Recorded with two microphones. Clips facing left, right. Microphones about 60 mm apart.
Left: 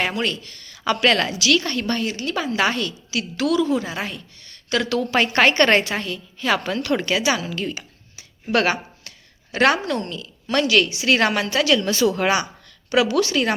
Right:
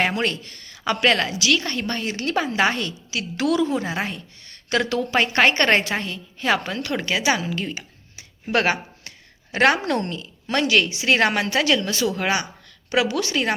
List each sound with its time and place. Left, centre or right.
0.2 s speech: right
0.9 s a woman's voice: centre
4.9 s a woman's voice: centre; by 6.5 s right
6.5 s a woman's voice: centre
8.5 s a sound: right
9.8 s speech: right
10.2 s a woman's voice: right
11.8 s speech: centre
12.9 s a woman's voice: centre